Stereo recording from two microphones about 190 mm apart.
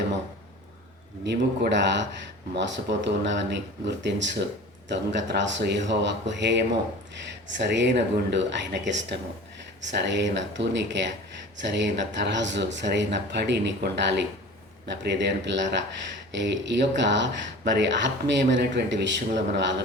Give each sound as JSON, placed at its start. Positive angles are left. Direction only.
{"t": 1.2, "sound": "speech", "side_deg": -65}